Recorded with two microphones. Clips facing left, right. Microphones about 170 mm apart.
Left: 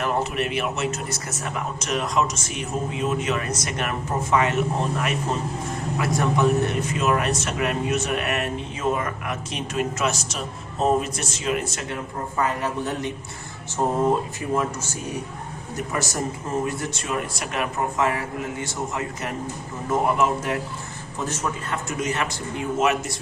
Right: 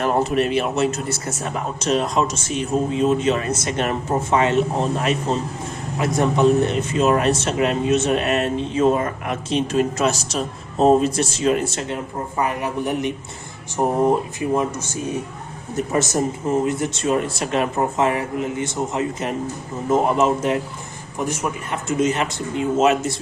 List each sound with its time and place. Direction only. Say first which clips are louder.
0.0 s a man's voice: right 5 dB; 35° right (ahead or behind)
12.4 s a man's voice: right 2 dB; 15° right (ahead or behind)
21.2 s a man's voice: right 4 dB; 15° right (ahead or behind)